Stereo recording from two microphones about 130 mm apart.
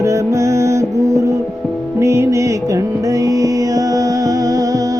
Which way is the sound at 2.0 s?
20° right (ahead or behind).